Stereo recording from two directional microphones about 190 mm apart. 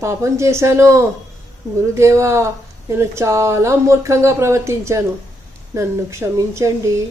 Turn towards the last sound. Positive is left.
turn(degrees=-15)  # may be behind; listen again after turning